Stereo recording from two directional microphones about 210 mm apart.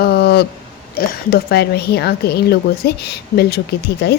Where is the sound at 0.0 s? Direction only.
50° left (ahead or behind).